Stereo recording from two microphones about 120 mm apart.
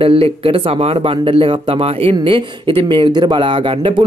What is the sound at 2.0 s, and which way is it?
Speech, 50° right (ahead or behind).